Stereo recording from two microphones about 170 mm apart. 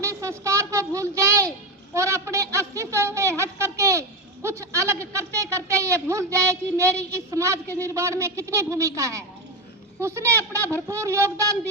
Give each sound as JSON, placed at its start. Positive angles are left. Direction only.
{"t": 0.0, "sound": "a woman's voice", "side_deg": -20}